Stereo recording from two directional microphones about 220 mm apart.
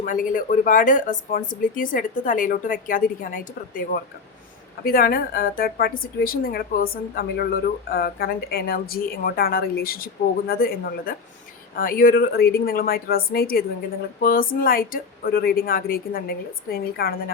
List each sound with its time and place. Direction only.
0.0 s a woman's voice: 35° left (ahead or behind)